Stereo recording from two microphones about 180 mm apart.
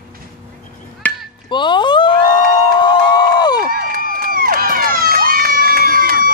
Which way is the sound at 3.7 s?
50° right (ahead or behind).